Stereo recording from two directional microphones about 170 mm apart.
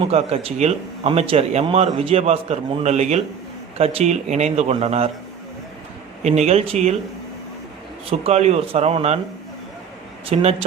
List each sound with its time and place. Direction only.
0.1 s speech: 35° right (ahead or behind)
6.2 s speech: 40° right (ahead or behind)
8.2 s speech: 40° right (ahead or behind)
10.2 s speech: 40° right (ahead or behind)